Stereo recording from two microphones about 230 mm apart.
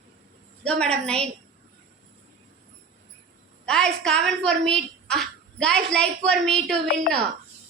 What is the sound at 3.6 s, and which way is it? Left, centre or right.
A woman's voice, centre.